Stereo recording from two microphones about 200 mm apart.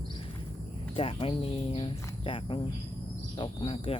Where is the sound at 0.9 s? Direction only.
30° left (ahead or behind).